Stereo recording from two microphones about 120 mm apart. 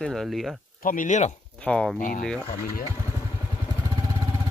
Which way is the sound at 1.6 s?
10° left (ahead or behind).